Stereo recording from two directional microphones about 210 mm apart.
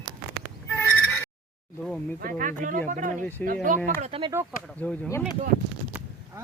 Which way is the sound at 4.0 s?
25° right (ahead or behind).